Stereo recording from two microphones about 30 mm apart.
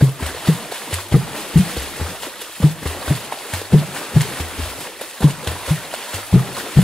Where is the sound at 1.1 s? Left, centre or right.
Centre.